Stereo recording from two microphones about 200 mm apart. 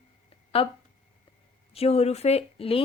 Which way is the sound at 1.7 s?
30° left (ahead or behind).